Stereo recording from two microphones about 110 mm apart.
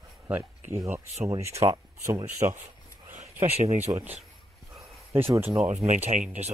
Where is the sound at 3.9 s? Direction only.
40° right (ahead or behind).